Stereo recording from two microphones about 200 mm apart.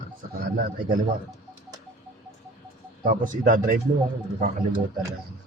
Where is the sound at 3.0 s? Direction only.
40° right (ahead or behind).